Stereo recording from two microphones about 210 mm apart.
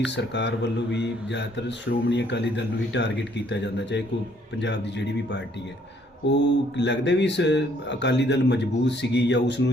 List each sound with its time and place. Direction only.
0.0 s speech: 55° left (ahead or behind)